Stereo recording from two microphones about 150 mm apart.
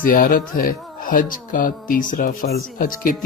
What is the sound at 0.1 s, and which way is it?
Speech, 70° left (ahead or behind).